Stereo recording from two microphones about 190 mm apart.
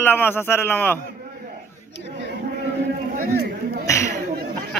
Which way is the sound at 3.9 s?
15° left (ahead or behind).